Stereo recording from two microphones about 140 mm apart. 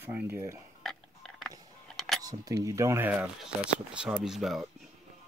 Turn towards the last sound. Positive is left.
turn(degrees=0)  # may be behind; listen again after turning